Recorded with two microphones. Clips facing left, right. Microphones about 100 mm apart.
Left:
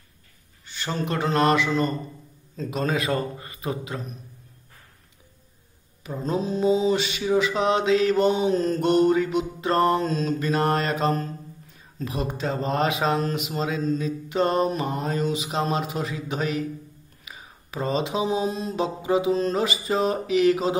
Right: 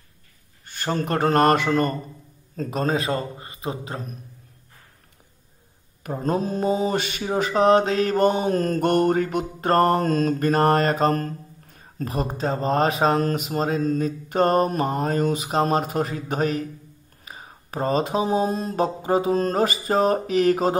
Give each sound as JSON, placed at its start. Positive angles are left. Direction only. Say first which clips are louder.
{"t": 0.7, "sound": "mantra", "louder": "right 3 dB", "side_deg": -50}
{"t": 2.5, "sound": "a man's voice", "louder": "right 2 dB", "side_deg": -45}
{"t": 6.0, "sound": "mantra", "louder": "right 2 dB", "side_deg": -55}